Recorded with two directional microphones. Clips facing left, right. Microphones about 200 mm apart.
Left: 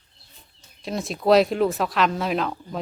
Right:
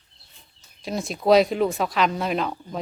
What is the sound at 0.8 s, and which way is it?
Speech, centre (ahead or behind).